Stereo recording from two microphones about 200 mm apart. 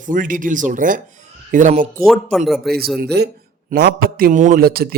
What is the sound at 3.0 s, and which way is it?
A man's voice, 55° right (ahead or behind).